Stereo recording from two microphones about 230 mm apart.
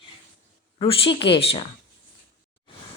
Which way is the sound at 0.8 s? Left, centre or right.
Left.